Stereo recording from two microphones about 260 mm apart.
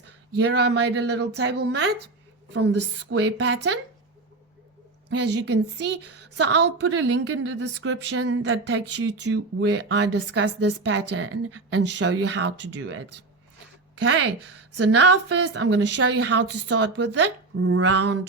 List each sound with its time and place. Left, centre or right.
0.3 s a woman's voice: right
5.0 s a woman's voice: right
12.6 s speech: right
14.0 s a woman's voice: right
14.3 s a woman's voice: right
15.1 s a woman's voice: right